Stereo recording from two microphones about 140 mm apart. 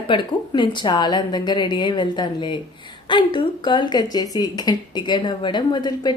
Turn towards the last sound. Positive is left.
turn(degrees=30)  # may be behind; listen again after turning